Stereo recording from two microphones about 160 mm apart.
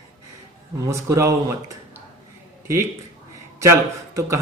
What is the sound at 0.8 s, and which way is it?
Speech, 20° right (ahead or behind).